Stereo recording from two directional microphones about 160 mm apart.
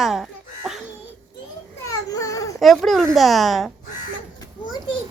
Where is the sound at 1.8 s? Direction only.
20° left (ahead or behind).